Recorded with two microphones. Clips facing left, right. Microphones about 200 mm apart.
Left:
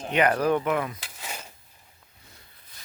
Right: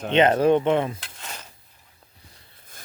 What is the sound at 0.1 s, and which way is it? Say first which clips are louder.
Speech: right 5 dB; 25° right (ahead or behind).